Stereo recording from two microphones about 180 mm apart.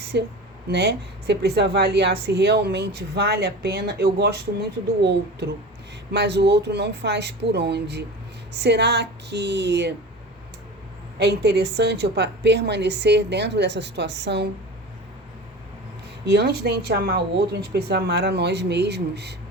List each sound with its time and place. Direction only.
0.0 s a sound: 65° right (ahead or behind)
0.7 s a woman's voice: 70° right (ahead or behind)
6.1 s a woman's voice: 70° right (ahead or behind)
11.2 s a woman's voice: 65° right (ahead or behind)
16.2 s speech: 65° right (ahead or behind)